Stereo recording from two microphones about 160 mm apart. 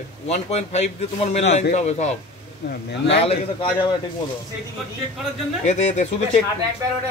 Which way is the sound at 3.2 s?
40° left (ahead or behind).